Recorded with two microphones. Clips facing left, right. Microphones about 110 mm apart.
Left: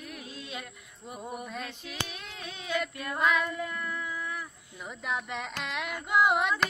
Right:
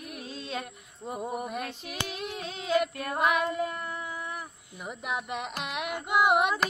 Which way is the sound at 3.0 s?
25° right (ahead or behind).